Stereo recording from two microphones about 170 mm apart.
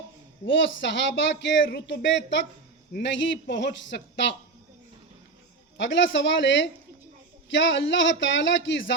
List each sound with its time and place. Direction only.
0.4 s speech: 90° left
2.9 s speech: 75° left (ahead or behind)
5.7 s speech: 90° left